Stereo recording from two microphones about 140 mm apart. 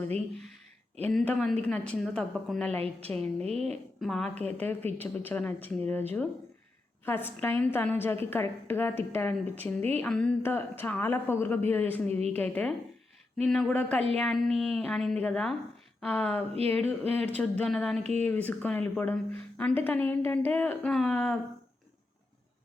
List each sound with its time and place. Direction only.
1.0 s a woman's voice: 10° left (ahead or behind)
4.0 s a woman's voice: centre (ahead or behind)
18.0 s speech: 50° right (ahead or behind)
18.3 s a woman's voice: 10° left (ahead or behind)